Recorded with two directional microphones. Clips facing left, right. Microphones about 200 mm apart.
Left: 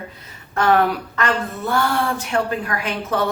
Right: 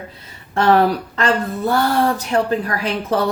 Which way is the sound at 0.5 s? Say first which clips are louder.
Right 3 dB; 30° right (ahead or behind).